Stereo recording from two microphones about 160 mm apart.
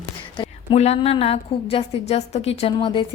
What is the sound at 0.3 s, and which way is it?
A woman's voice, 40° left (ahead or behind).